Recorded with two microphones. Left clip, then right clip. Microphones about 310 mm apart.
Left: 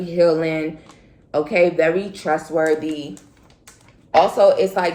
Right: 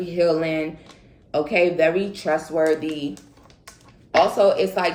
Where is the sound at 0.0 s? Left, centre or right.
Centre.